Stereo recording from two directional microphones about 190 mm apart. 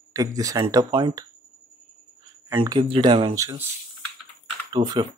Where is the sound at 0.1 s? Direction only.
15° right (ahead or behind).